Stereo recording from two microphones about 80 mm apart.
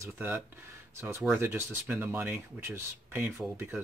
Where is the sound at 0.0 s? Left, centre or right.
Right.